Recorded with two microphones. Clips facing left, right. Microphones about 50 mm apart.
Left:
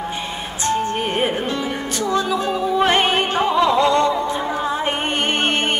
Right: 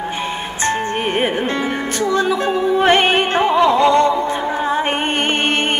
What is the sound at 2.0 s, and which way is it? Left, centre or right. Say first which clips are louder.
Music: right 3 dB; right.